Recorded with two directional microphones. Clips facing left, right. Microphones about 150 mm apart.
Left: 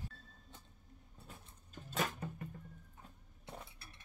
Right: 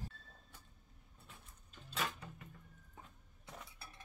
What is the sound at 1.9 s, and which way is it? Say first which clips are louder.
Music: left 4 dB; 45° left (ahead or behind).